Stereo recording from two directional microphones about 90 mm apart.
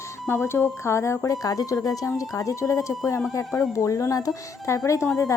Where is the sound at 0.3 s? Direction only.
30° left (ahead or behind).